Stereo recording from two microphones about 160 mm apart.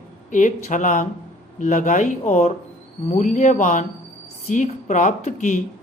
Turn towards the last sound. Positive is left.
turn(degrees=50)  # may be behind; listen again after turning